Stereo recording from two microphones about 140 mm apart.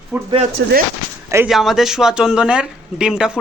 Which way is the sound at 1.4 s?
Centre (ahead or behind).